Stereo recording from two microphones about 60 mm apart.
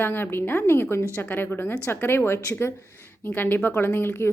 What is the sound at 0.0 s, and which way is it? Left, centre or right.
Speech, left.